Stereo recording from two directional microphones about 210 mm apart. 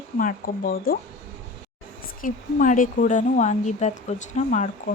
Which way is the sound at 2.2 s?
40° left (ahead or behind).